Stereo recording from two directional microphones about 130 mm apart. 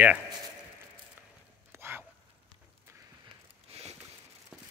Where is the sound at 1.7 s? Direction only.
20° right (ahead or behind).